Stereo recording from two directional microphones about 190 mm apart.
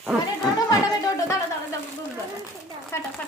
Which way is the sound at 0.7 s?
20° left (ahead or behind).